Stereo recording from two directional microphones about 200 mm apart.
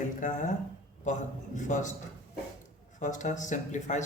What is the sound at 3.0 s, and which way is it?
Speech, 40° left (ahead or behind).